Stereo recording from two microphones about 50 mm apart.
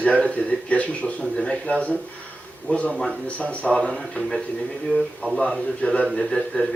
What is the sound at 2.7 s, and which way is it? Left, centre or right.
Speech, left.